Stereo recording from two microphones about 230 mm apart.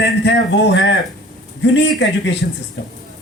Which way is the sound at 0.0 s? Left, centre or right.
Left.